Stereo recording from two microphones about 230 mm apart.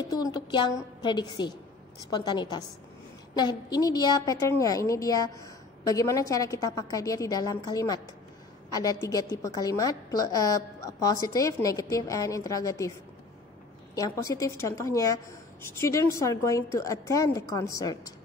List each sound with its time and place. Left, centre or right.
0.1 s a woman's voice: centre
13.9 s a woman's voice: centre